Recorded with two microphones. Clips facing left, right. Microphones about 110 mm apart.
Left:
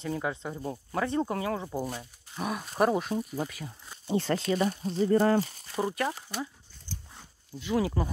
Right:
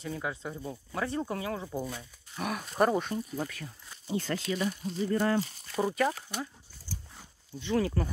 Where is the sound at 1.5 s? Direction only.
15° left (ahead or behind).